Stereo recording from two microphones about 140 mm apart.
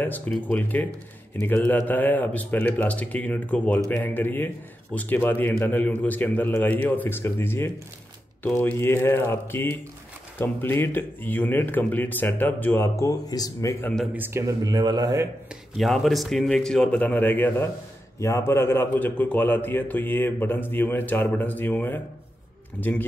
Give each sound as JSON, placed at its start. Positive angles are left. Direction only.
{"t": 0.0, "sound": "a man's voice", "side_deg": 10}
{"t": 14.1, "sound": "a man's voice", "side_deg": -15}
{"t": 14.6, "sound": "speech", "side_deg": -30}
{"t": 15.8, "sound": "a man's voice", "side_deg": 0}